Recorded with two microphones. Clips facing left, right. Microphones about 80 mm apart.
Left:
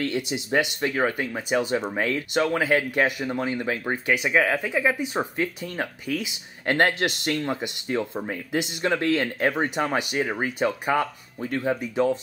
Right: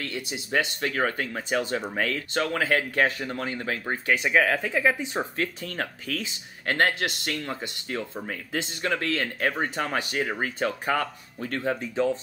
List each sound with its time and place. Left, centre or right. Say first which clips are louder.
0.0 s speech: left 7 dB; left